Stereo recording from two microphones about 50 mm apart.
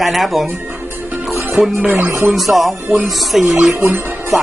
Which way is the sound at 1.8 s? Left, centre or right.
Right.